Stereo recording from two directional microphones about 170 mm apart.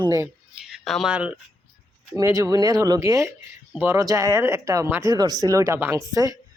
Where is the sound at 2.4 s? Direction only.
20° right (ahead or behind).